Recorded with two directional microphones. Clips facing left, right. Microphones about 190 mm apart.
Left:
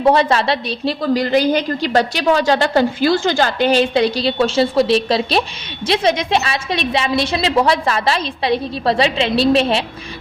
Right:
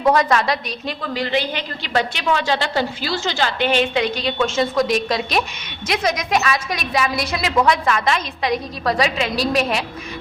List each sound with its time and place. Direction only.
0.0 s a woman's voice: 30° left (ahead or behind)